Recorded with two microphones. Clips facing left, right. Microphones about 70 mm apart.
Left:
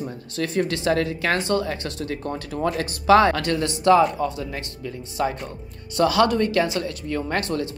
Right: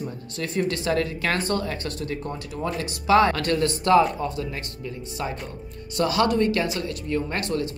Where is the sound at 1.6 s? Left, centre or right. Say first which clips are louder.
Left 2 dB; left.